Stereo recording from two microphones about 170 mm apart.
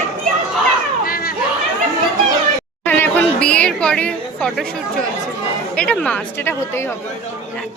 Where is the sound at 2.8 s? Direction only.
10° left (ahead or behind).